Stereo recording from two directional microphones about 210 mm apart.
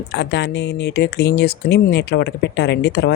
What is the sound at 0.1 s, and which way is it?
Speech, 55° left (ahead or behind).